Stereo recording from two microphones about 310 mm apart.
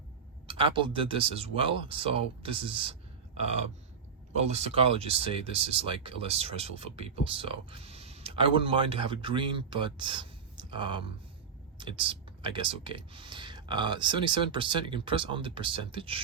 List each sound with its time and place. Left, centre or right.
0.4 s speech: centre
4.4 s speech: right